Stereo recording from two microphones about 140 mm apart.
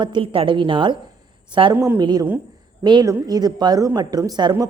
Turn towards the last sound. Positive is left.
turn(degrees=-30)  # may be behind; listen again after turning